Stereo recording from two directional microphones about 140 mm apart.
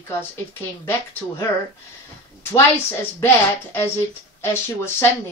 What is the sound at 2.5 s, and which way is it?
A woman's voice, 20° left (ahead or behind).